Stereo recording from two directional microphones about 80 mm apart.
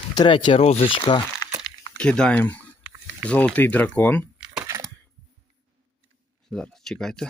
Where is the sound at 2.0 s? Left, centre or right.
Centre.